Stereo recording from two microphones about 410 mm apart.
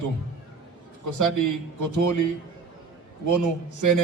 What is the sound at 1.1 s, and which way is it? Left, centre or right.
A man's voice, right.